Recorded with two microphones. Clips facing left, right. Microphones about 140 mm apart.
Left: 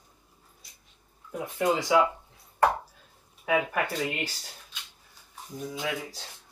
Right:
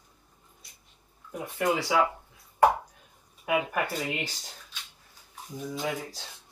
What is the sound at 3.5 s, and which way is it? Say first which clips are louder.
Speech: left 1 dB; 20° right (ahead or behind).